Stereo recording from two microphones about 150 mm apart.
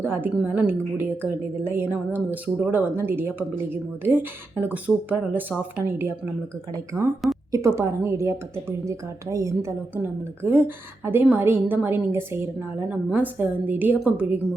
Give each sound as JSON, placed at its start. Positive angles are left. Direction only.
{"t": 0.0, "sound": "a woman's voice", "side_deg": -15}
{"t": 7.5, "sound": "a woman's voice", "side_deg": -20}